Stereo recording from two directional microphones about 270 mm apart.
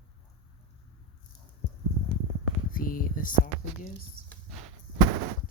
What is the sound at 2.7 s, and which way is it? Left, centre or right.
Speech, left.